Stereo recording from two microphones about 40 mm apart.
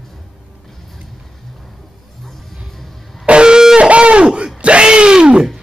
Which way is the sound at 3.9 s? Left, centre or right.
Right.